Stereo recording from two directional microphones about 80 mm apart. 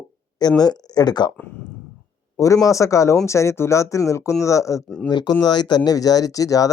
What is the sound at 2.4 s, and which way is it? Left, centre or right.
Speech, left.